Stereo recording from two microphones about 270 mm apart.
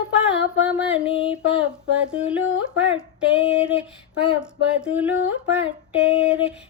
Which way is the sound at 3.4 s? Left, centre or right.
Left.